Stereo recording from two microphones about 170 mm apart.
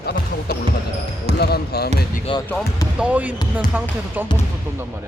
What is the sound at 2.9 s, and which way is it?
Speech, 10° right (ahead or behind).